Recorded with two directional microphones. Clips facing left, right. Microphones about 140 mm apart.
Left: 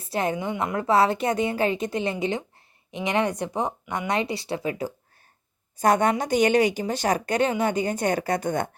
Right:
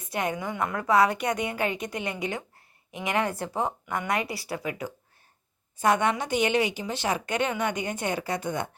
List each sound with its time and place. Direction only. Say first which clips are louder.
0.0 s a woman's voice: left 4 dB; 30° left (ahead or behind); by 8.7 s 45° left (ahead or behind)